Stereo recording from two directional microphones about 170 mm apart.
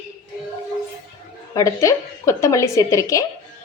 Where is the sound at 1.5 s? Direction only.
20° left (ahead or behind).